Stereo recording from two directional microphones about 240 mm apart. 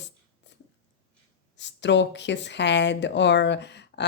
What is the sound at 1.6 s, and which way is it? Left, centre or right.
Speech, left.